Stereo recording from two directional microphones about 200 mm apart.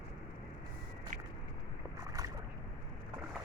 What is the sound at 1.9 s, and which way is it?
Boat, 20° right (ahead or behind).